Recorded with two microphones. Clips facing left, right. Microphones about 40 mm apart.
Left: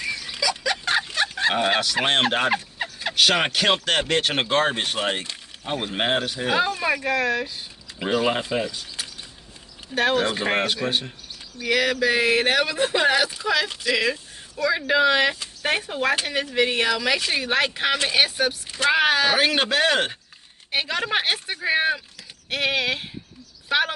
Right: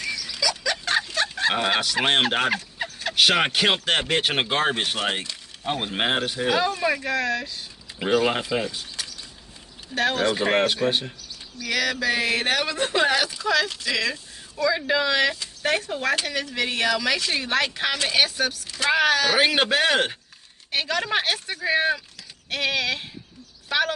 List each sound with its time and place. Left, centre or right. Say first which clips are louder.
0.0 s a sound: left 1 dB; left
0.4 s a sound: left 1 dB; centre
1.1 s livestock: left 1 dB; centre
2.0 s speech: right 2 dB; centre
2.5 s a sound: left 2 dB; centre
3.2 s speech: even; centre
6.5 s speech: left 1 dB; left
8.0 s speech: right 1 dB; centre
9.0 s a sound: left 1 dB; centre
9.9 s speech: left 1 dB; centre
11.6 s speech: left 3 dB; left
19.3 s speech: even; centre
20.7 s speech: even; centre